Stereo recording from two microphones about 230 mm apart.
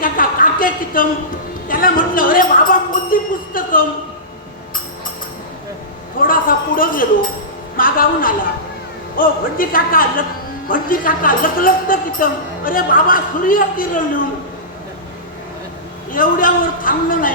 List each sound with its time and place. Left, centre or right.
0.0 s a sound: left
1.6 s speech: left
6.2 s speech: left
16.1 s speech: left